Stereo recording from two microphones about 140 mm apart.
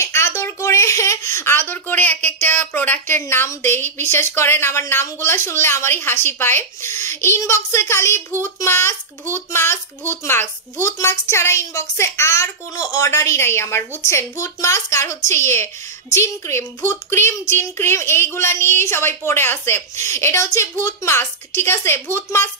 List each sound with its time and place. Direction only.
0.0 s a woman's voice: 20° left (ahead or behind)